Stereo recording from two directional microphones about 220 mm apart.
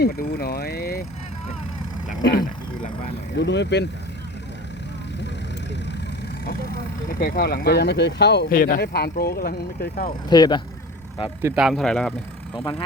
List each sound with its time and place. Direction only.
0.0 s speech: 45° left (ahead or behind)
2.0 s vehicle: 45° left (ahead or behind)
3.3 s speech: 50° left (ahead or behind)
6.4 s speech: 45° left (ahead or behind)
10.2 s speech: 20° left (ahead or behind)
11.4 s speech: 5° right (ahead or behind)